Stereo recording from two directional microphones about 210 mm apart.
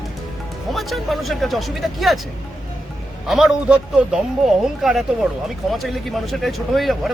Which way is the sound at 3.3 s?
Centre (ahead or behind).